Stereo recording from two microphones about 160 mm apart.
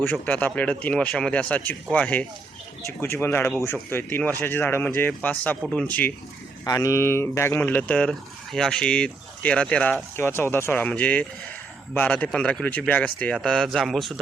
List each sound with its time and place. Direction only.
0.0 s speech: 10° left (ahead or behind)
6.7 s speech: 20° left (ahead or behind); by 14.1 s centre (ahead or behind)